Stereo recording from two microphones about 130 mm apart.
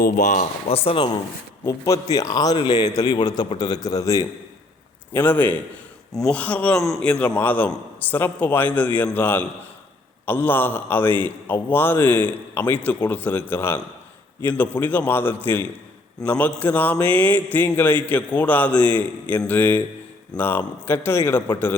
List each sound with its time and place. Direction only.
0.0 s speech: 75° left (ahead or behind)
0.7 s speech: 45° left (ahead or behind)
1.6 s a man's voice: 25° left (ahead or behind)
5.1 s a man's voice: 15° left (ahead or behind)